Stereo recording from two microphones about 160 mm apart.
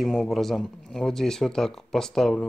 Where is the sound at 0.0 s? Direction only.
Centre (ahead or behind).